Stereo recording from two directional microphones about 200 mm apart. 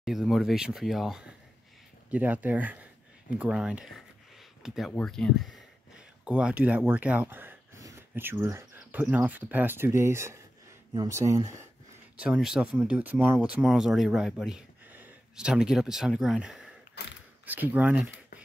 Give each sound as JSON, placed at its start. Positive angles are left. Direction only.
{"t": 0.0, "sound": "speech", "side_deg": 0}
{"t": 6.9, "sound": "a sound", "side_deg": -10}
{"t": 8.1, "sound": "speech", "side_deg": -10}
{"t": 12.2, "sound": "speech", "side_deg": -5}
{"t": 17.0, "sound": "speech", "side_deg": 55}
{"t": 17.5, "sound": "speech", "side_deg": -10}